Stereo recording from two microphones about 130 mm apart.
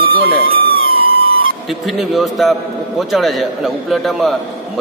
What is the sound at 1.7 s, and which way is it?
A man's voice, centre (ahead or behind).